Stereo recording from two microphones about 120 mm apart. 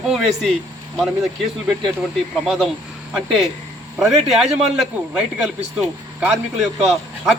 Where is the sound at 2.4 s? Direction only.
Centre (ahead or behind).